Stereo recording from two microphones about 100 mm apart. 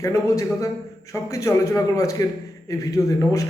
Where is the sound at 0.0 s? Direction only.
35° left (ahead or behind).